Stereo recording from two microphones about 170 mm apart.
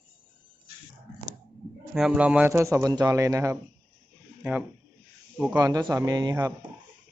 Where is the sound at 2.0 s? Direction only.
5° right (ahead or behind).